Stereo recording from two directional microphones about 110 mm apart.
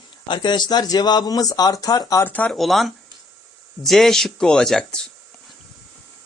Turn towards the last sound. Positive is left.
turn(degrees=5)  # may be behind; listen again after turning